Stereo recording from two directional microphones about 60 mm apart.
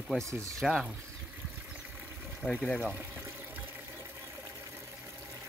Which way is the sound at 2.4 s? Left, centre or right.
Left.